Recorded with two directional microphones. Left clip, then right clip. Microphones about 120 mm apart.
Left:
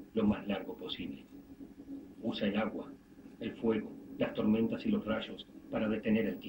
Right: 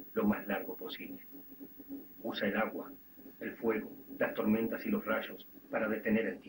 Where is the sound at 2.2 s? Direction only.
25° right (ahead or behind).